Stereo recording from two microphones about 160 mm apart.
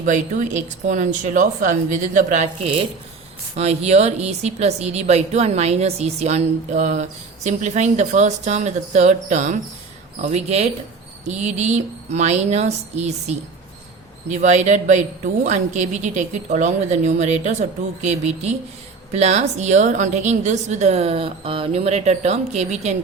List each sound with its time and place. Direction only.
0.0 s a woman's voice: 50° right (ahead or behind)
3.5 s a woman's voice: 45° right (ahead or behind)